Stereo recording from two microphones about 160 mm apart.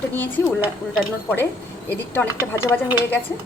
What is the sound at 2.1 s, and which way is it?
A woman's voice, 15° left (ahead or behind).